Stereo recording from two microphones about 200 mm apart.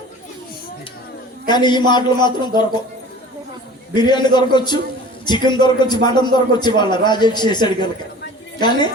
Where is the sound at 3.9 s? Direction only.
20° left (ahead or behind).